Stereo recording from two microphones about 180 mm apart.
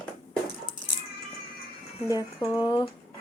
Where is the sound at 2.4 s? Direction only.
25° left (ahead or behind).